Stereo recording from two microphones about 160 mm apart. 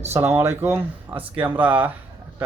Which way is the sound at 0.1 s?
15° right (ahead or behind).